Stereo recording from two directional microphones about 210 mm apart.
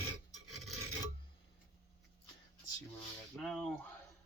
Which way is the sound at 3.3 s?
Centre (ahead or behind).